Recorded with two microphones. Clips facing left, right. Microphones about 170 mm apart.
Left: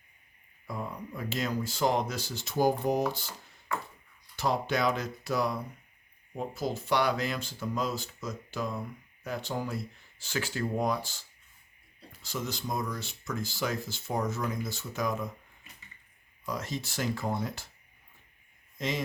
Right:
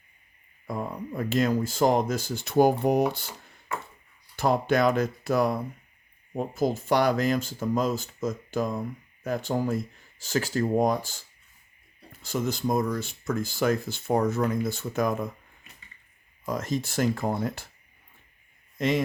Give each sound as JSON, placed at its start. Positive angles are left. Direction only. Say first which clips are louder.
{"t": 0.7, "sound": "speech", "louder": "right 5 dB", "side_deg": -50}
{"t": 4.4, "sound": "speech", "louder": "right 6 dB", "side_deg": -50}
{"t": 16.5, "sound": "speech", "louder": "right 6 dB", "side_deg": -50}
{"t": 18.8, "sound": "speech", "louder": "right 8 dB", "side_deg": -60}